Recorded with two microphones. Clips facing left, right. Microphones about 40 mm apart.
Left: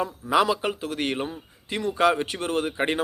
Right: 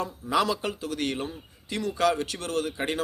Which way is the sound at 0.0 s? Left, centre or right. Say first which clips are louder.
Left 4 dB; centre.